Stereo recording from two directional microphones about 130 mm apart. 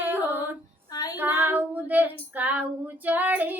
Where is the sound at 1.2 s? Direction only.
15° right (ahead or behind).